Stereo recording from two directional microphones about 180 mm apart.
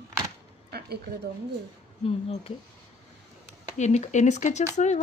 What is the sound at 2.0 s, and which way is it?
Speech, 35° left (ahead or behind).